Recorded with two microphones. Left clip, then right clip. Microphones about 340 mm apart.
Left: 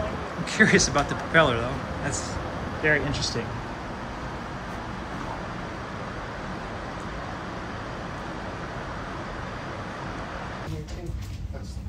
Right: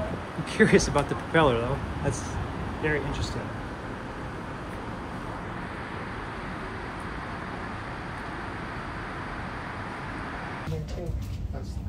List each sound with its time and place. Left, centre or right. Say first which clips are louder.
0.5 s speech: left 2 dB; centre
2.8 s speech: left 5 dB; centre